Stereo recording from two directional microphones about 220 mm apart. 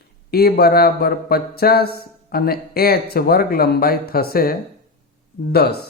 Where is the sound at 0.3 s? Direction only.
45° left (ahead or behind).